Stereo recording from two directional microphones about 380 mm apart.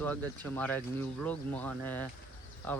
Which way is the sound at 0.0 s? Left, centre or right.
Centre.